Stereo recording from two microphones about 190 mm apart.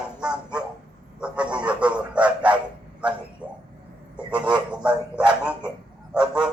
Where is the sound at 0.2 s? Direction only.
5° right (ahead or behind).